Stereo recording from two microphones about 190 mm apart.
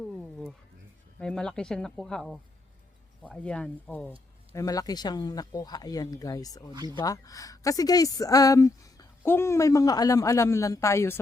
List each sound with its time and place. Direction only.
0.0 s a sound: 5° left (ahead or behind)
1.2 s speech: 5° left (ahead or behind)
4.5 s speech: 20° left (ahead or behind)
6.7 s speech: 20° right (ahead or behind)
7.0 s speech: 20° left (ahead or behind)